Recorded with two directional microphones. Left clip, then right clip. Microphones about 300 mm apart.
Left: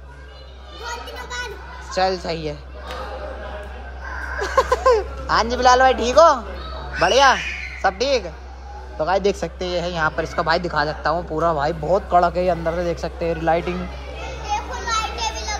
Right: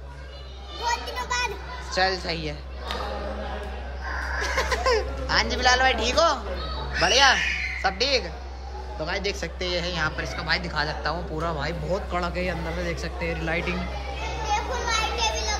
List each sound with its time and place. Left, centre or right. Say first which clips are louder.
1.9 s speech: left 4 dB; centre
4.4 s speech: left 8 dB; centre
14.4 s children playing: left 1 dB; right